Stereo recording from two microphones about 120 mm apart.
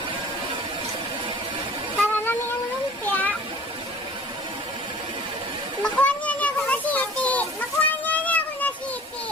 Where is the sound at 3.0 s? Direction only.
15° left (ahead or behind).